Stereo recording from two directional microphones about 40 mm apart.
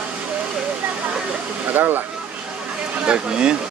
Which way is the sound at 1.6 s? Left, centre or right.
Right.